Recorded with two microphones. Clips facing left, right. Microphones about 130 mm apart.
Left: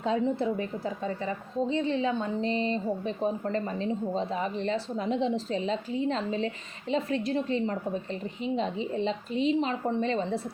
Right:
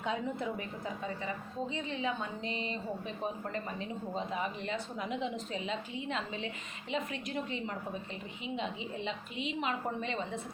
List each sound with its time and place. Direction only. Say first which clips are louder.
0.0 s a woman's voice: left 8 dB; 35° left (ahead or behind)